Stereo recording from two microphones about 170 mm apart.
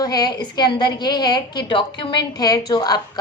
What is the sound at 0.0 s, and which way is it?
A woman's voice, 25° left (ahead or behind).